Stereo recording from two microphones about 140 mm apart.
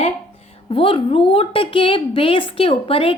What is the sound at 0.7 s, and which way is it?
A woman's voice, 40° left (ahead or behind).